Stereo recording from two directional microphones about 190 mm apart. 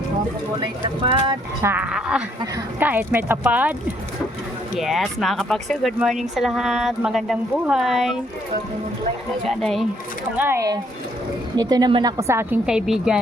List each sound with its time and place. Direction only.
1.6 s a woman's voice: 10° right (ahead or behind)
4.8 s speech: centre (ahead or behind)
9.5 s speech: centre (ahead or behind)
10.3 s a woman's voice: 10° right (ahead or behind)